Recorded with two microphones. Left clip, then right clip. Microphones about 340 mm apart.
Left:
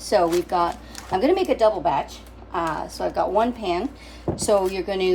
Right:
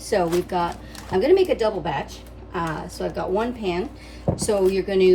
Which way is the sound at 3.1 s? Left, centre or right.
Centre.